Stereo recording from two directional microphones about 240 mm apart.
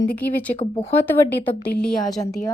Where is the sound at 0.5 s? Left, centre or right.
Left.